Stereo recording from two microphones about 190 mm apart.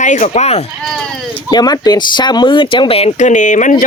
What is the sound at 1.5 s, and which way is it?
Speech, 20° left (ahead or behind).